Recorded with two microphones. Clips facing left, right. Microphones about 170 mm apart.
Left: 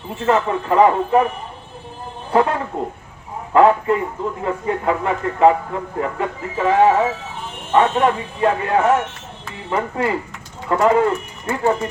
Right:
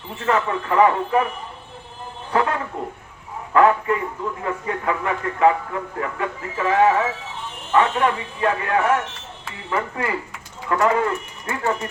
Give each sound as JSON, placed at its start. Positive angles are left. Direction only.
{"t": 0.3, "sound": "a man's voice", "side_deg": 30}
{"t": 2.3, "sound": "a sound", "side_deg": 30}
{"t": 3.5, "sound": "a man's voice", "side_deg": 25}